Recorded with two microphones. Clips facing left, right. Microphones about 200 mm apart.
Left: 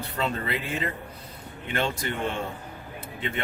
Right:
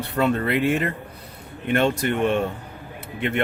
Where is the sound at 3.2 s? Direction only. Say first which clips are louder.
Right 8 dB; 65° right (ahead or behind).